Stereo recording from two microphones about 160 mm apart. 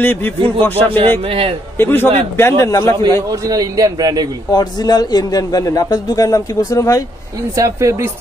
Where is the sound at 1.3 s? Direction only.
35° right (ahead or behind).